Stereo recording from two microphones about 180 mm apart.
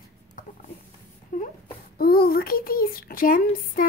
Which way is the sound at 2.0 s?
55° left (ahead or behind).